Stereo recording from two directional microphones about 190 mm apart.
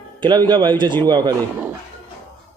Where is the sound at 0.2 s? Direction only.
25° right (ahead or behind).